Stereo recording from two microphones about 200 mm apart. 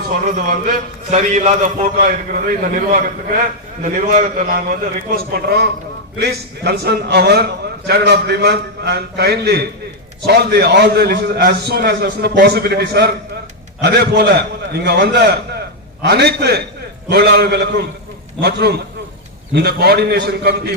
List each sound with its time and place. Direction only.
0.1 s a man's voice: 40° right (ahead or behind)
6.7 s a man's voice: 55° right (ahead or behind)